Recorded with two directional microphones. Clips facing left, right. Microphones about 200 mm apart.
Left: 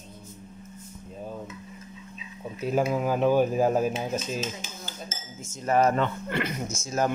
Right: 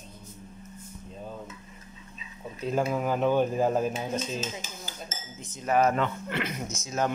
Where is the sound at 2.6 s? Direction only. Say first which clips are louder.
Left 2 dB; 5° left (ahead or behind).